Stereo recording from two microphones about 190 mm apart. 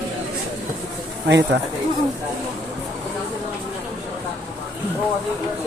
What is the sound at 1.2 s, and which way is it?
Speech, 70° right (ahead or behind).